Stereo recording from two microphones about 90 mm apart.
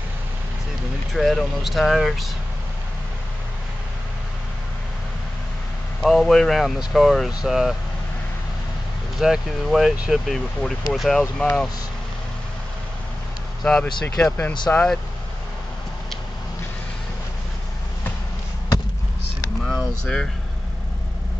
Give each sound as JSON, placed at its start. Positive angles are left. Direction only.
{"t": 1.1, "sound": "speech", "side_deg": 0}
{"t": 5.9, "sound": "speech", "side_deg": 0}
{"t": 9.2, "sound": "speech", "side_deg": -5}
{"t": 10.2, "sound": "speech", "side_deg": 0}
{"t": 13.7, "sound": "speech", "side_deg": 10}
{"t": 19.6, "sound": "vehicle", "side_deg": 0}